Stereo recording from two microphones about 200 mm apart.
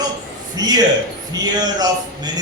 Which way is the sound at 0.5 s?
20° right (ahead or behind).